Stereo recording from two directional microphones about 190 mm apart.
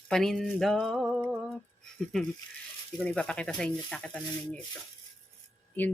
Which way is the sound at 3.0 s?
5° left (ahead or behind).